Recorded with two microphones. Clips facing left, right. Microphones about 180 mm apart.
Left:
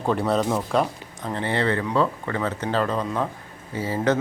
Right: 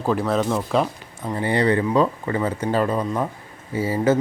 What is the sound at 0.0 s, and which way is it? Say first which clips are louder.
Speech: right 1 dB; centre (ahead or behind).